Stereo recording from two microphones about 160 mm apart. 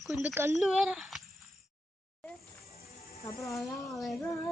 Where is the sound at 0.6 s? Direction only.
5° right (ahead or behind).